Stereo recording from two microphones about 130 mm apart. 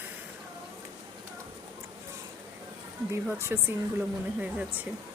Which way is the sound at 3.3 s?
15° right (ahead or behind).